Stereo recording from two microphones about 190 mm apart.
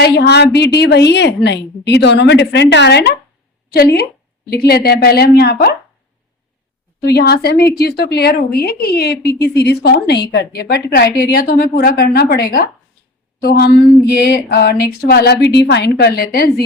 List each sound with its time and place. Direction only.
0.0 s a woman's voice: 60° left (ahead or behind)
7.0 s a woman's voice: 55° left (ahead or behind)